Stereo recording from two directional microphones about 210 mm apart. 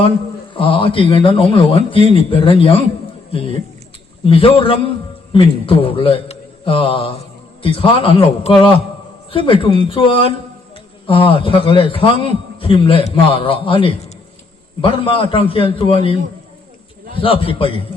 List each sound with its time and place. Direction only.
0.5 s a man's voice: 25° left (ahead or behind)
4.3 s a man's voice: 25° left (ahead or behind)
17.2 s a man's voice: 25° left (ahead or behind)